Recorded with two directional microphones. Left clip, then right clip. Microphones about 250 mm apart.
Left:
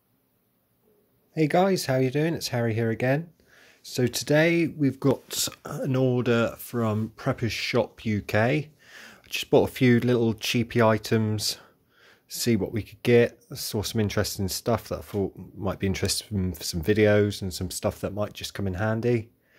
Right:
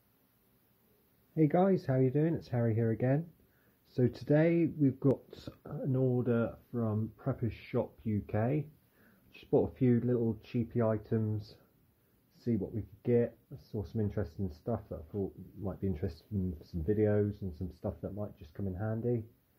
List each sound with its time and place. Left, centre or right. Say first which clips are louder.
1.3 s speech: left 6 dB; centre; by 14.4 s left
14.7 s speech: left 11 dB; left